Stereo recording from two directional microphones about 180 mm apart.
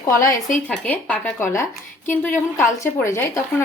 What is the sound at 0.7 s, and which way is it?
A woman's voice, 10° left (ahead or behind).